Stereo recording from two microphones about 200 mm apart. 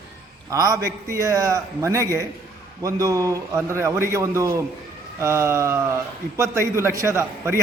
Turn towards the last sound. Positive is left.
turn(degrees=-15)  # may be behind; listen again after turning